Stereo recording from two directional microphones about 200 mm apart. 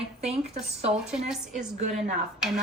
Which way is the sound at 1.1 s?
5° right (ahead or behind).